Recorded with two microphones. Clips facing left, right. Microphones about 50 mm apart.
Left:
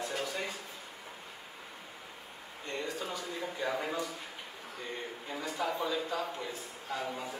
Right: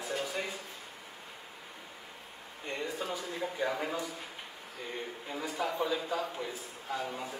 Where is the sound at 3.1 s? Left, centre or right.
Centre.